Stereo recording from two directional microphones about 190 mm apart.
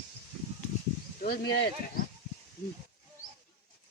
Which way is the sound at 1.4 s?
60° left (ahead or behind).